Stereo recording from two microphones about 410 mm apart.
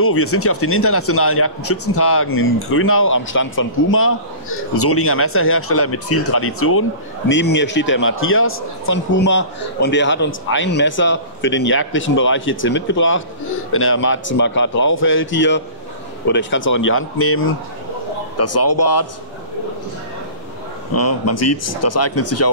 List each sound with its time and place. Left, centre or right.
0.0 s a man's voice: left
20.9 s a man's voice: left